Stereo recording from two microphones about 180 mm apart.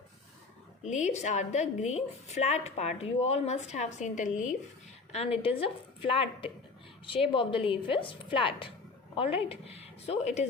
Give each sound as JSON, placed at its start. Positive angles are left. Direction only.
{"t": 0.9, "sound": "a woman's voice", "side_deg": 40}
{"t": 5.1, "sound": "a woman's voice", "side_deg": 35}